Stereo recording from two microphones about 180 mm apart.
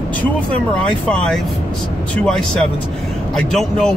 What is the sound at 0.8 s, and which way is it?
Speech, 5° left (ahead or behind).